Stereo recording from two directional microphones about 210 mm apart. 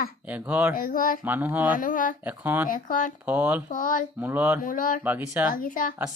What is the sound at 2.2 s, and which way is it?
Speech, 10° right (ahead or behind).